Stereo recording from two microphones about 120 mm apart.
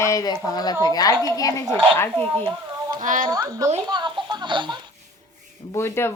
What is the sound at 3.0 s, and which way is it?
Speech, 90° right.